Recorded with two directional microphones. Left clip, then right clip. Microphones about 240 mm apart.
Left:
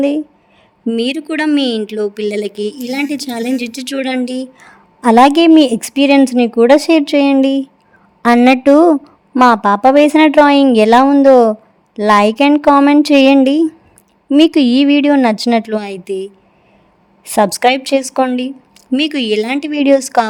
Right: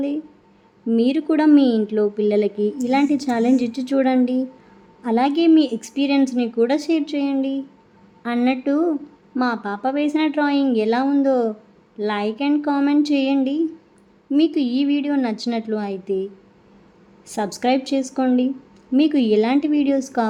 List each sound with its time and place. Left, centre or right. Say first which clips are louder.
0.9 s a woman's voice: left 2 dB; left